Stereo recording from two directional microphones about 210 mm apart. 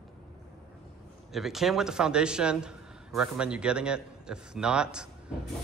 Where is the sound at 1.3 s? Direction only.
Centre (ahead or behind).